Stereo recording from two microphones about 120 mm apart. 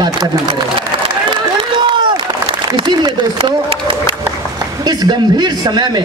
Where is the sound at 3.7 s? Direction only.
45° right (ahead or behind).